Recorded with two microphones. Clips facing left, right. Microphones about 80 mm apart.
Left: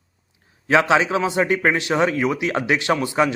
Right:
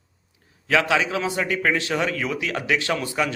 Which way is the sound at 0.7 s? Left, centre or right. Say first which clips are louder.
Left 4 dB; left.